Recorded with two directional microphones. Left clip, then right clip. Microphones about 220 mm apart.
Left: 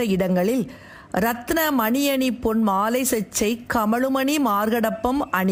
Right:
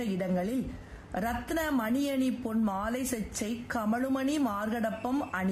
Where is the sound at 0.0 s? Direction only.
35° left (ahead or behind).